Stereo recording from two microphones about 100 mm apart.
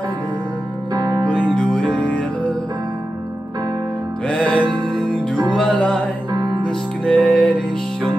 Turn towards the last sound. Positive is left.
turn(degrees=10)  # may be behind; listen again after turning